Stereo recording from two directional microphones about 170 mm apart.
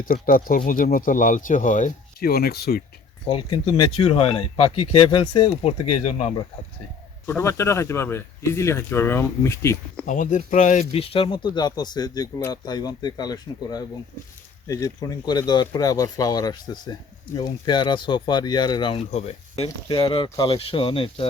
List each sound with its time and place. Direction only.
0.0 s speech: 60° left (ahead or behind)
3.2 s speech: 30° left (ahead or behind)
7.3 s speech: 15° left (ahead or behind)
10.1 s speech: 50° left (ahead or behind)
10.9 s speech: 35° left (ahead or behind)